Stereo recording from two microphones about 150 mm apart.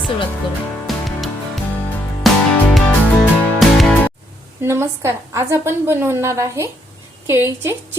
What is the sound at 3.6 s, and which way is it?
Music, centre (ahead or behind).